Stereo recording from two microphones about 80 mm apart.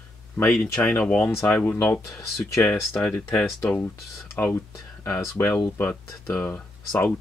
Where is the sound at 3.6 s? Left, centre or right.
Left.